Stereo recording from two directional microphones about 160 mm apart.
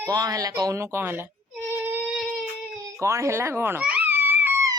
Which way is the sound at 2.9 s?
20° right (ahead or behind).